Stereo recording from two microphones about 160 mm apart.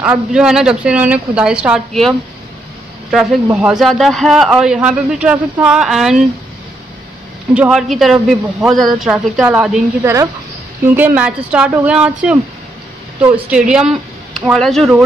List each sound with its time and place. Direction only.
0.0 s a man's voice: 5° right (ahead or behind)
7.5 s a man's voice: 5° right (ahead or behind)
11.1 s speech: 10° right (ahead or behind)
13.5 s speech: 5° right (ahead or behind)